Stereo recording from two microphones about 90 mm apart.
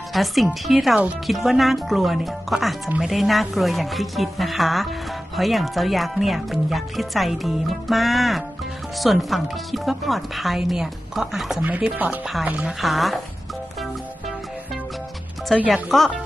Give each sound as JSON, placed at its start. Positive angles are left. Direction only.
{"t": 0.1, "sound": "speech", "side_deg": 0}
{"t": 11.6, "sound": "speech", "side_deg": -20}
{"t": 12.8, "sound": "speech", "side_deg": 0}
{"t": 15.7, "sound": "speech", "side_deg": 0}